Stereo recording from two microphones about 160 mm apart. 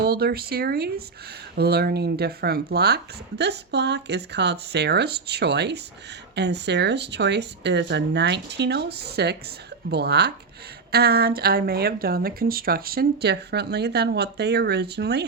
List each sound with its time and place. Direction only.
0.0 s speech: 75° right (ahead or behind)
10.9 s speech: 80° right